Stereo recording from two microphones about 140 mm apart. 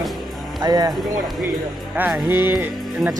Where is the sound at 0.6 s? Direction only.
30° right (ahead or behind).